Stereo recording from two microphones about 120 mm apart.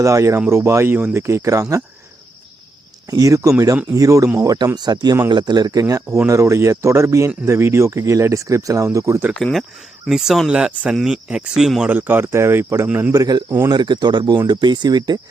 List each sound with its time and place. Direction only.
0.0 s speech: 25° right (ahead or behind)
3.1 s speech: 30° right (ahead or behind)
9.3 s speech: centre (ahead or behind); by 13.1 s 15° right (ahead or behind)
13.1 s speech: 30° right (ahead or behind)